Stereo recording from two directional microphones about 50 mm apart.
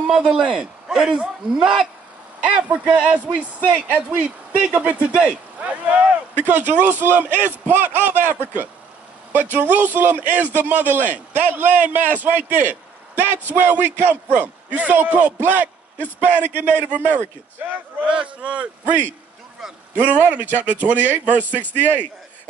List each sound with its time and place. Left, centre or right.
0.0 s a man's voice: centre
2.4 s a man's voice: right
18.0 s a man's voice: right